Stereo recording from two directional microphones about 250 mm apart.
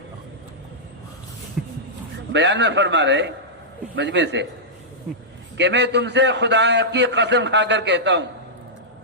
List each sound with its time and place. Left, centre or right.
1.6 s speech: centre
2.3 s a man's voice: right
5.5 s a man's voice: right